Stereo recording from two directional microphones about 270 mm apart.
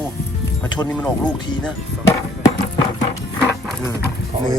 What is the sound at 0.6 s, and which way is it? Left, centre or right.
Speech, centre.